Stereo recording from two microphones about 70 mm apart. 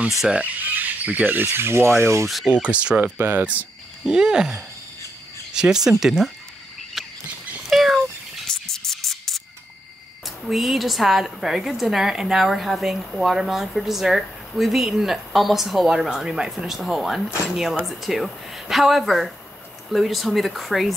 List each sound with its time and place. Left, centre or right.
0.4 s speech: right
2.2 s a woman's voice: centre
2.5 s speech: centre
3.2 s speech: right
4.0 s speech: centre
7.0 s patter: centre
7.7 s a sound: centre
8.5 s music: centre
10.2 s a woman's voice: centre